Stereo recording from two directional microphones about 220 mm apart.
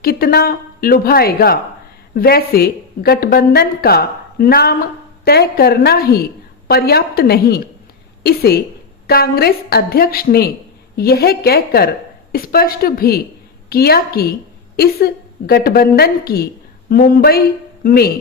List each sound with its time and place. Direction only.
0.0 s a woman's voice: 45° left (ahead or behind)